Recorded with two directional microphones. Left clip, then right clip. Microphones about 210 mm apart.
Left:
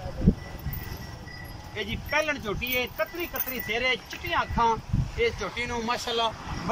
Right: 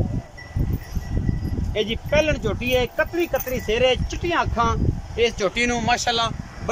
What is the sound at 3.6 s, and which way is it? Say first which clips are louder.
Speech: right 6 dB; 55° right (ahead or behind).